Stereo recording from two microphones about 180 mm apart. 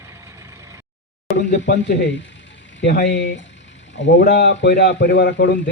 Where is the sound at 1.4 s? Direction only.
75° left (ahead or behind).